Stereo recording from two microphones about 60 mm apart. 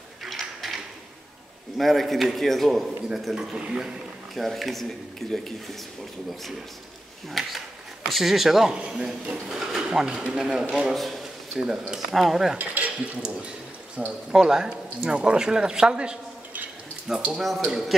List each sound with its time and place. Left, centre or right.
0.2 s a sound: centre
1.8 s a man's voice: centre
3.3 s speech: centre
4.4 s a man's voice: centre
7.2 s a man's voice: centre
10.9 s a sound: centre
11.9 s a man's voice: centre
12.5 s dishes: right
14.0 s speech: centre
17.3 s a man's voice: centre